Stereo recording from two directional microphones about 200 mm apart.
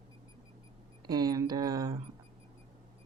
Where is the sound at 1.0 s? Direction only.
20° right (ahead or behind).